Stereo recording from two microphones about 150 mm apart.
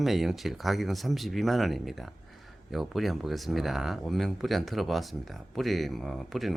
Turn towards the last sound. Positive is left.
turn(degrees=0)  # may be behind; listen again after turning